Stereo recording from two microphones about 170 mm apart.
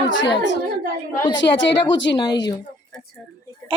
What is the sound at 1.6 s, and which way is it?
Speech, 90° left.